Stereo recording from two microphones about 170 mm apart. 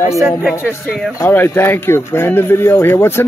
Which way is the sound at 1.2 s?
15° left (ahead or behind).